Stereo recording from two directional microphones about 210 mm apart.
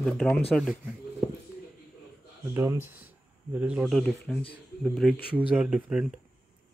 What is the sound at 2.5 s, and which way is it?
A man's voice, 10° right (ahead or behind).